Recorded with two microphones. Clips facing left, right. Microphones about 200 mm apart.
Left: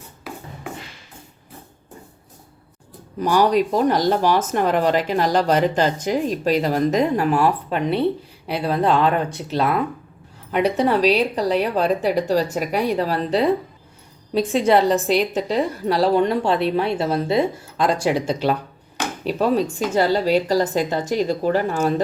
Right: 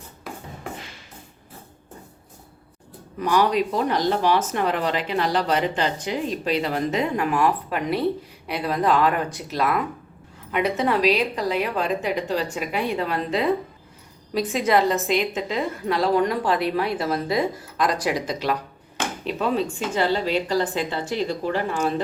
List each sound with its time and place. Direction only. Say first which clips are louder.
3.2 s a woman's voice: left 3 dB; 40° left (ahead or behind)